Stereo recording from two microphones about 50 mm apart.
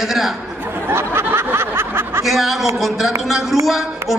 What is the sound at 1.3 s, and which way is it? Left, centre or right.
Snicker, right.